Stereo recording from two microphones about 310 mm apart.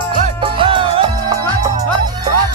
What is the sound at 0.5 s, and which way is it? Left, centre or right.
Music, centre.